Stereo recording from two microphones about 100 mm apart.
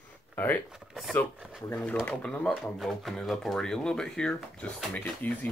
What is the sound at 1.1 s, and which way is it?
Speech, 15° left (ahead or behind).